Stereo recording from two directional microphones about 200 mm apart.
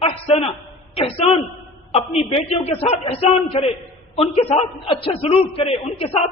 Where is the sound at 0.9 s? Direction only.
30° left (ahead or behind).